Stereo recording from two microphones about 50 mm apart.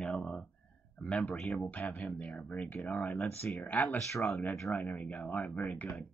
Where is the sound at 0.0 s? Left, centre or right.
Centre.